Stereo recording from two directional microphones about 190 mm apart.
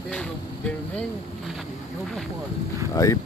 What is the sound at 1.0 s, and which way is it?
Boat, centre (ahead or behind).